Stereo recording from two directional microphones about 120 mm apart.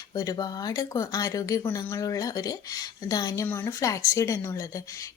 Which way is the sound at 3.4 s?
20° left (ahead or behind).